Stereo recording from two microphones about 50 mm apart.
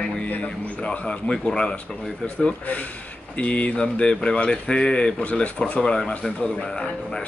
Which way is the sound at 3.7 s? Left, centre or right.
Left.